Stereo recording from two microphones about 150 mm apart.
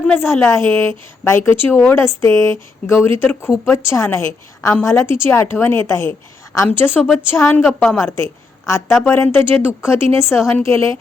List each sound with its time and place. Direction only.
0.0 s a woman's voice: 15° left (ahead or behind)
7.7 s a woman's voice: centre (ahead or behind)
7.9 s a woman's voice: 15° left (ahead or behind)